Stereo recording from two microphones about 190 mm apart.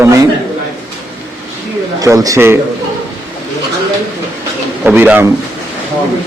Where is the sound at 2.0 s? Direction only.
20° right (ahead or behind).